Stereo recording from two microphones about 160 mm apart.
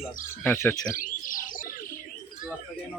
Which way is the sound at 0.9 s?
55° left (ahead or behind).